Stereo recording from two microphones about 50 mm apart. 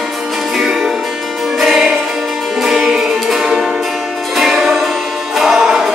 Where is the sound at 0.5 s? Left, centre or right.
Centre.